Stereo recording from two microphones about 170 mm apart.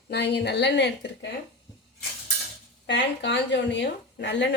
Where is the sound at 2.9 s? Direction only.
90° left.